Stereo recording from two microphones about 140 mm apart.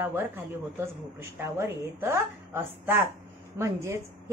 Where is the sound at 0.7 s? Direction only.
20° right (ahead or behind).